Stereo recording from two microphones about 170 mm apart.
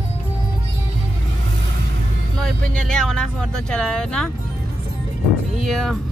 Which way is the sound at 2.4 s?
5° left (ahead or behind).